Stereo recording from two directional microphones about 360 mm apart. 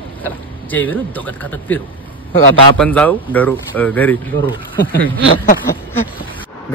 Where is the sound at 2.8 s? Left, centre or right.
Centre.